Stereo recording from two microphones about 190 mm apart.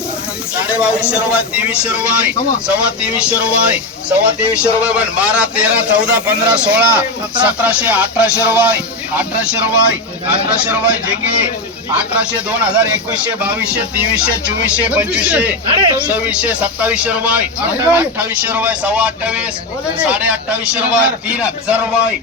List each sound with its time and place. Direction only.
0.5 s a man's voice: 5° right (ahead or behind)
15.6 s speech: 25° right (ahead or behind)
16.0 s a man's voice: 5° right (ahead or behind)